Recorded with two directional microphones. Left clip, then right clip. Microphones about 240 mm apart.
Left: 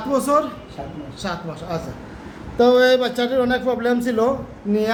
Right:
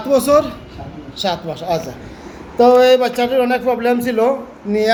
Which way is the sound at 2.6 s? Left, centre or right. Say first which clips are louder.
Right 4 dB; right.